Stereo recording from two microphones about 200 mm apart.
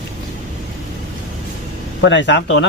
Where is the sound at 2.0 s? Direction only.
65° left (ahead or behind).